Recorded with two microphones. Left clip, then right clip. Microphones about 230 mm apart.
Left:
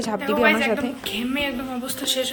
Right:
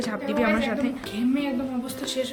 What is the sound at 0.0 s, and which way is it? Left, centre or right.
Speech, left.